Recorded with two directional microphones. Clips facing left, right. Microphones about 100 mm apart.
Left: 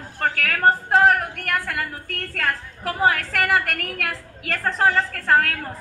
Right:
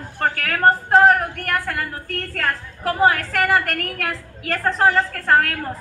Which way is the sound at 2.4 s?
5° right (ahead or behind).